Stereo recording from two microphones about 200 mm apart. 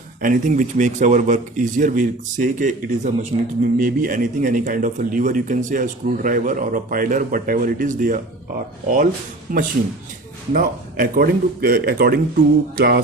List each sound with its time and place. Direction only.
0.2 s speech: 40° right (ahead or behind)
9.5 s a man's voice: 45° right (ahead or behind)